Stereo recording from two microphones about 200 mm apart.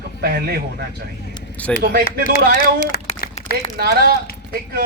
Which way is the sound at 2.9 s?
50° left (ahead or behind).